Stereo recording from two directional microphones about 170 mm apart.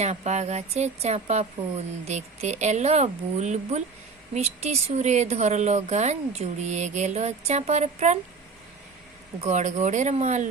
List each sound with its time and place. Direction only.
0.0 s speech: 40° right (ahead or behind)
9.4 s speech: 45° right (ahead or behind)